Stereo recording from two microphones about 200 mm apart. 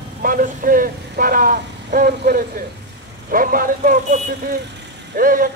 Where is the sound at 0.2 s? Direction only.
45° right (ahead or behind).